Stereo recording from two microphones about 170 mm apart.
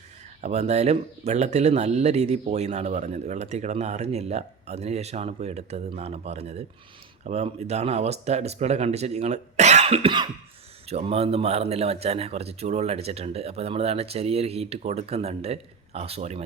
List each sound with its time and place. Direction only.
0.4 s speech: 40° right (ahead or behind)